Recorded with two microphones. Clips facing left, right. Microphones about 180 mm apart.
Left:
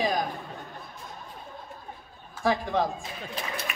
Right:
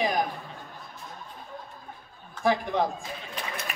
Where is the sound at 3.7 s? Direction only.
35° right (ahead or behind).